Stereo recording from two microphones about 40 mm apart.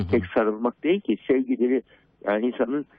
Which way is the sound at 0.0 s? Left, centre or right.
Centre.